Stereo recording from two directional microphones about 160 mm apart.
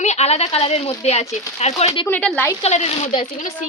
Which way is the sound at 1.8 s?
20° left (ahead or behind).